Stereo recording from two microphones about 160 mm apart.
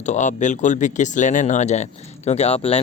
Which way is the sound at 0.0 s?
50° left (ahead or behind).